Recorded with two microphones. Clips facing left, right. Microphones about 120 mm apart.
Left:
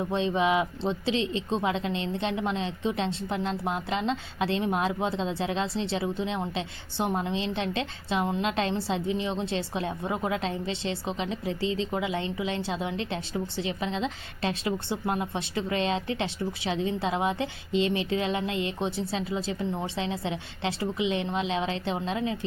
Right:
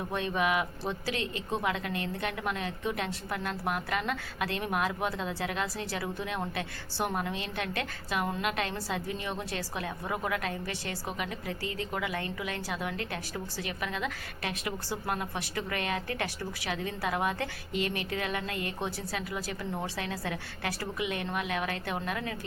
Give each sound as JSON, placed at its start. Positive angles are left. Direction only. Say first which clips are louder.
{"t": 0.1, "sound": "a woman's voice", "louder": "left 4 dB", "side_deg": 20}